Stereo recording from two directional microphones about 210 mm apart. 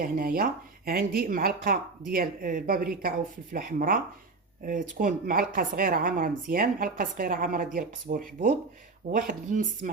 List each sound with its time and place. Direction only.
0.0 s speech: 40° right (ahead or behind)